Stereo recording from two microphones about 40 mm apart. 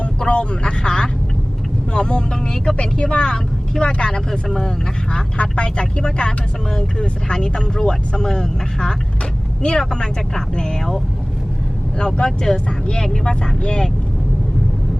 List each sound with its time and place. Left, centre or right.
0.3 s speech: left
4.3 s speech: centre
5.4 s speech: left
12.2 s speech: centre